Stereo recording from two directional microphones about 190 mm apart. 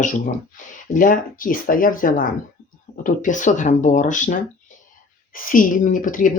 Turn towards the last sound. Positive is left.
turn(degrees=45)  # may be behind; listen again after turning